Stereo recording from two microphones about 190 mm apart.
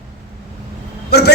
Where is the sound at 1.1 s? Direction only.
60° left (ahead or behind).